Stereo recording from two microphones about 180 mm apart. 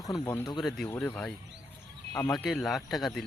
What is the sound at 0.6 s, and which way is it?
Speech, centre (ahead or behind).